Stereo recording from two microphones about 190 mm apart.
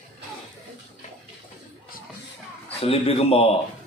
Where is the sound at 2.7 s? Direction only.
30° left (ahead or behind).